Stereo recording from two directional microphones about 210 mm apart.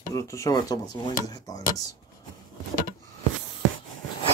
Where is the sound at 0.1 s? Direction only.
15° left (ahead or behind).